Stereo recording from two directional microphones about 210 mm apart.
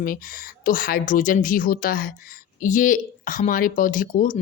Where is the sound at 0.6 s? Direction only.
40° left (ahead or behind).